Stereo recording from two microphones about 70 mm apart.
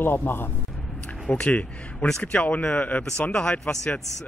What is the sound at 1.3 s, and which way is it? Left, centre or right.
Speech, centre.